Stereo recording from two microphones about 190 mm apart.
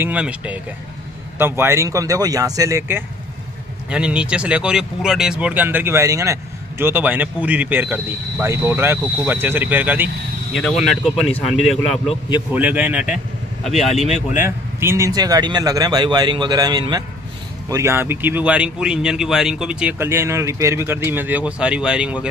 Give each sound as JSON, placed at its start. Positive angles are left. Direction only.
{"t": 0.0, "sound": "speech", "side_deg": -5}
{"t": 3.9, "sound": "speech", "side_deg": -5}
{"t": 14.3, "sound": "a man's voice", "side_deg": -10}